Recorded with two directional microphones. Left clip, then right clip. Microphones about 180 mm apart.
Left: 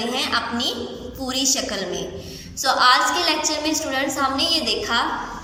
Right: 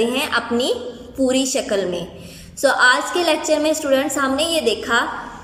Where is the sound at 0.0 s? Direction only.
40° right (ahead or behind).